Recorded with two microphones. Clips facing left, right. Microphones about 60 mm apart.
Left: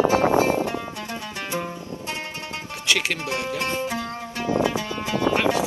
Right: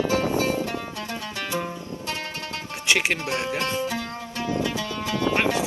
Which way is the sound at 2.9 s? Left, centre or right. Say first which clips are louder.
Right 1 dB; right.